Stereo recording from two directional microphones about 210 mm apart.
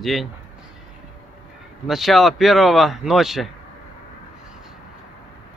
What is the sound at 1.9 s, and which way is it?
Speech, centre (ahead or behind).